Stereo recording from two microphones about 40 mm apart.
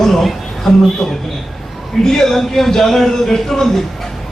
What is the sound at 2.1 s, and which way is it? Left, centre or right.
A man's voice, centre.